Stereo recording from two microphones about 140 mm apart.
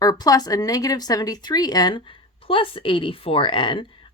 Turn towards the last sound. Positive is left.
turn(degrees=35)  # may be behind; listen again after turning